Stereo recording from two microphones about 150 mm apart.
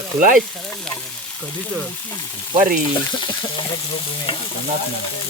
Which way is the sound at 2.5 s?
60° right (ahead or behind).